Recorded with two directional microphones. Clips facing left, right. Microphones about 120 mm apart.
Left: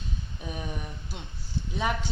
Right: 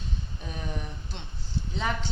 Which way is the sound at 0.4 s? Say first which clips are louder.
Left 1 dB; 5° left (ahead or behind).